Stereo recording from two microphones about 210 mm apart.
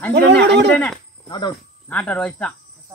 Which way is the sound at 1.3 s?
20° left (ahead or behind).